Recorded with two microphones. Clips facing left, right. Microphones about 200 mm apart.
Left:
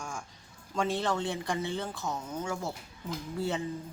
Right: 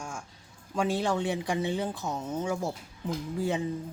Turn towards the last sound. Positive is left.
turn(degrees=-15)  # may be behind; listen again after turning